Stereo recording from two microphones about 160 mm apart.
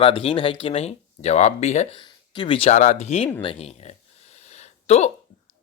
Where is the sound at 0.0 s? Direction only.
35° left (ahead or behind).